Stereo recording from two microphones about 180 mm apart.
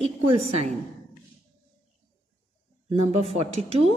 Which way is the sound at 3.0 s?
35° right (ahead or behind).